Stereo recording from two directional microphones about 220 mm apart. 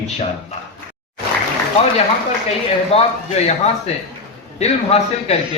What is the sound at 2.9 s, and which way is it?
Speech, 25° left (ahead or behind).